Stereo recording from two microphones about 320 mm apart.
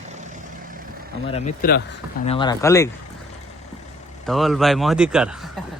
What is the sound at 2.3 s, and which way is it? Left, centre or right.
Speech, centre.